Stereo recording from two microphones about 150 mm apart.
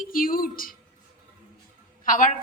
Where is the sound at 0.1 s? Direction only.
70° left (ahead or behind).